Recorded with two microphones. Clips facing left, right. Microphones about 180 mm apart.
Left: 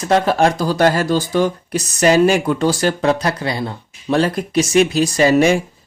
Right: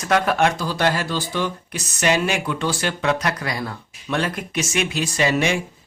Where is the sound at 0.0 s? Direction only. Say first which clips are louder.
Left 4 dB; 30° left (ahead or behind).